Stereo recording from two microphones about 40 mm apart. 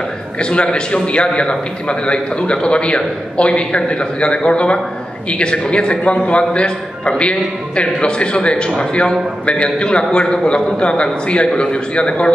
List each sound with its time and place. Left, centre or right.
0.4 s a man's voice: left